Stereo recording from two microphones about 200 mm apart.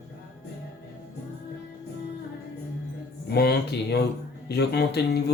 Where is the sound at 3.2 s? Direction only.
55° left (ahead or behind).